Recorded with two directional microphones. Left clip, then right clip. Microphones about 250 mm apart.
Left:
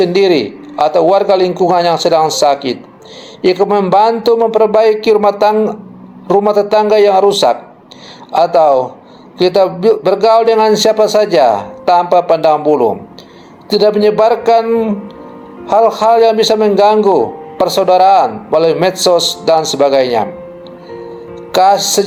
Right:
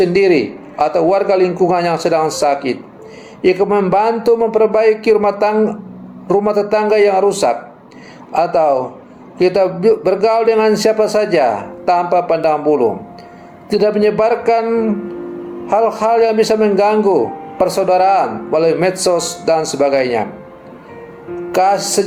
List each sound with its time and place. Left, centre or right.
0.0 s speech: left
19.1 s speech: centre
19.7 s speech: left
22.0 s speech: left